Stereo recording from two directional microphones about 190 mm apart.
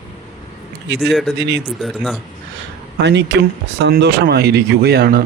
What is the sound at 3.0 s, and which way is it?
Speech, 65° right (ahead or behind).